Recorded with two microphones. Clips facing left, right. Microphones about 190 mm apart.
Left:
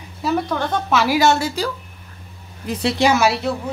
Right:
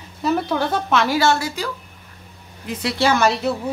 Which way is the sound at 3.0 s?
5° left (ahead or behind).